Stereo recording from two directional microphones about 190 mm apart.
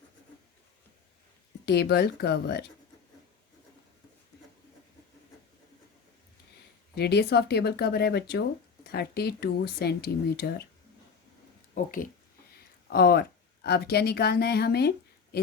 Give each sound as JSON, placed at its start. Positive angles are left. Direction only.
{"t": 1.6, "sound": "speech", "side_deg": 60}
{"t": 6.9, "sound": "speech", "side_deg": 60}
{"t": 11.7, "sound": "speech", "side_deg": 45}
{"t": 12.9, "sound": "speech", "side_deg": 55}